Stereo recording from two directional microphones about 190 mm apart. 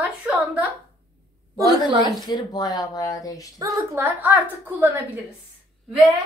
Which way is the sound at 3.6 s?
15° right (ahead or behind).